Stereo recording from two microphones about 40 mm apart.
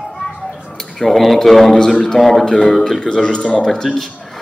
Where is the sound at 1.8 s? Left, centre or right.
Centre.